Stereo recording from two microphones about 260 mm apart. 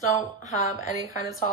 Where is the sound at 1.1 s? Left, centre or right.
Centre.